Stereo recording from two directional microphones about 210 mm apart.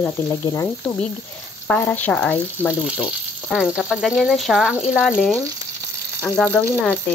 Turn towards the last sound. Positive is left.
turn(degrees=10)  # may be behind; listen again after turning